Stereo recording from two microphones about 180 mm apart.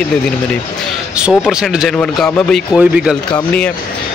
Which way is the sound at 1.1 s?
5° right (ahead or behind).